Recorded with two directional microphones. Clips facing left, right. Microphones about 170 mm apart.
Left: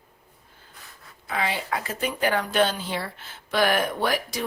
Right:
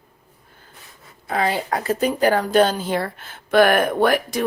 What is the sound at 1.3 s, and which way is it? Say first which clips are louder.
A woman's voice: right 6 dB; 40° right (ahead or behind).